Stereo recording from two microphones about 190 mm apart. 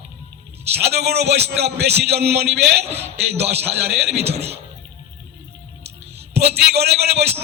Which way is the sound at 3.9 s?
60° right (ahead or behind).